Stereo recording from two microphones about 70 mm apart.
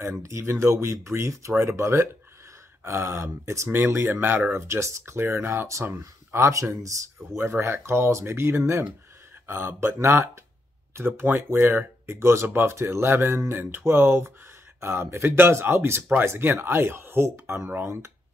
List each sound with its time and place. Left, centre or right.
0.0 s speech: right
17.6 s speech: right